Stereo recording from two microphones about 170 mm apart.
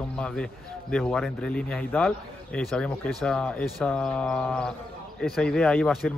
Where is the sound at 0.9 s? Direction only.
5° left (ahead or behind).